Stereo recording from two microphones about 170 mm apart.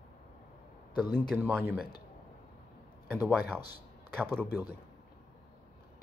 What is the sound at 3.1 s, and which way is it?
Speech, 10° right (ahead or behind).